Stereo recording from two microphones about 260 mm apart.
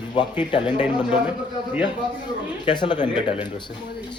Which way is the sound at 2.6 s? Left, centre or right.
Centre.